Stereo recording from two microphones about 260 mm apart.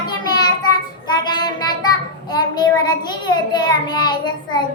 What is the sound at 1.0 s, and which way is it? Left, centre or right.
Child singing, centre.